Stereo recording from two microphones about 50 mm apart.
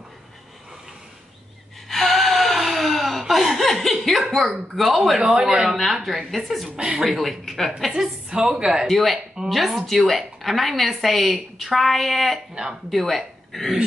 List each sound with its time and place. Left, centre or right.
1.9 s gasp: centre
4.7 s a woman's voice: centre
6.8 s a woman's voice: centre
7.1 s a woman's voice: centre
7.9 s a woman's voice: centre
8.8 s a woman's voice: centre
12.6 s speech: right
12.9 s speech: centre